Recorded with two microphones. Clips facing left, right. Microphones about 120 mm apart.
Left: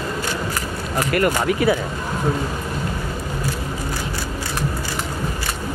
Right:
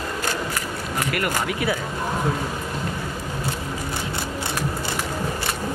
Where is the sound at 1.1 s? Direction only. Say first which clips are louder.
Left 8 dB; 35° left (ahead or behind).